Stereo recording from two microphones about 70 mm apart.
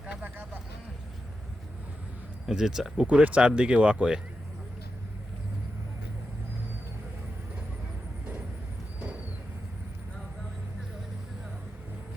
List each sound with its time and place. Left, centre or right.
0.0 s vehicle: centre
2.5 s speech: centre
3.1 s speech: centre